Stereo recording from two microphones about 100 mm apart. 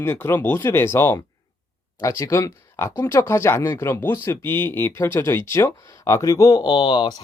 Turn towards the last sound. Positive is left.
turn(degrees=55)  # may be behind; listen again after turning